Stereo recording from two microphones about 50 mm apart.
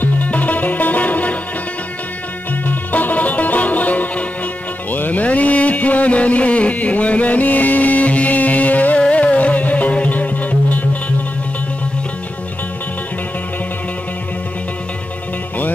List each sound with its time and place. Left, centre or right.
0.0 s music: left
2.6 s music: left